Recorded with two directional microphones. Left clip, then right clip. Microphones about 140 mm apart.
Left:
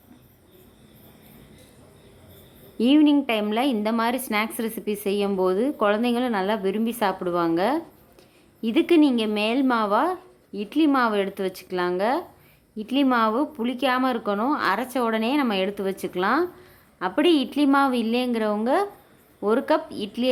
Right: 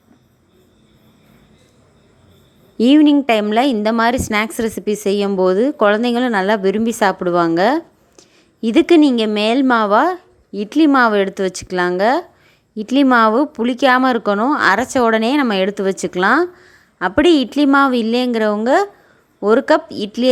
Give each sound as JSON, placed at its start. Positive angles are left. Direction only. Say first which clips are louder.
{"t": 2.7, "sound": "a woman's voice", "louder": "right 7 dB", "side_deg": -40}